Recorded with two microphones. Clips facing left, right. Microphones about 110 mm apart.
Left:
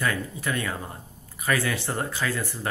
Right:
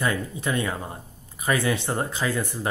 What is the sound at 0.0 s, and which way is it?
Speech, 20° right (ahead or behind).